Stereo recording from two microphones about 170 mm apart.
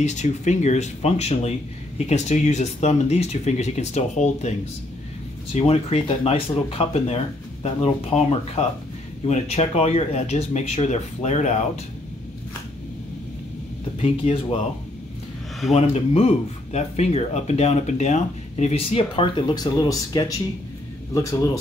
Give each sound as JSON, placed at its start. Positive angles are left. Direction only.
{"t": 0.0, "sound": "speech", "side_deg": 45}
{"t": 13.9, "sound": "speech", "side_deg": 35}
{"t": 15.7, "sound": "speech", "side_deg": 40}